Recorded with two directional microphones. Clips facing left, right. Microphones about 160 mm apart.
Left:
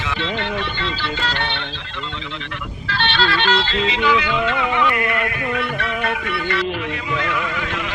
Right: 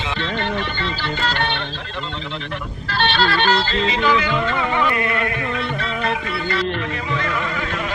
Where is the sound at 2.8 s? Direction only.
40° right (ahead or behind).